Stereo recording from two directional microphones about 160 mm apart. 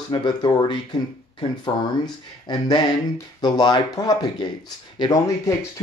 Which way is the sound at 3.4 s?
25° left (ahead or behind).